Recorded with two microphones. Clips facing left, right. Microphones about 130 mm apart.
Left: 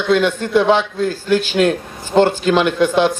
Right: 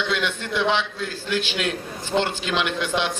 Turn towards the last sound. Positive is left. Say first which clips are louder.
# left 10 dB
turn(degrees=45)  # may be behind; listen again after turning